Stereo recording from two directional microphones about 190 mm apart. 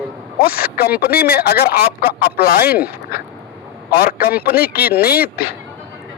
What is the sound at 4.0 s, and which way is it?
A man's voice, 55° left (ahead or behind).